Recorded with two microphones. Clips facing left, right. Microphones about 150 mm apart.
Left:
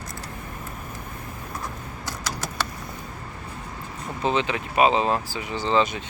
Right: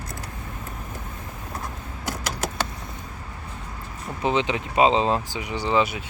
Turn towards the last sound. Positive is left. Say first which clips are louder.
# even
turn(degrees=-10)  # may be behind; listen again after turning